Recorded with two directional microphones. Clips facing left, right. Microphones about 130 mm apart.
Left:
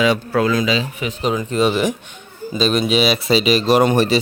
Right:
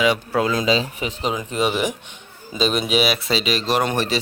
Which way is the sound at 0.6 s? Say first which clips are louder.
Left 1 dB; 35° right (ahead or behind).